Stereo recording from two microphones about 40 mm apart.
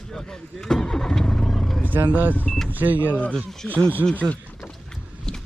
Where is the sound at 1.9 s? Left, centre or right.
Right.